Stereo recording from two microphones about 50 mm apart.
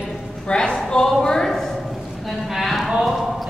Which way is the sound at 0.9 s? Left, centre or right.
Centre.